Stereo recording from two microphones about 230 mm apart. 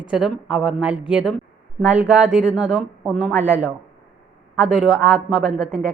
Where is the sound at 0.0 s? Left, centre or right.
Centre.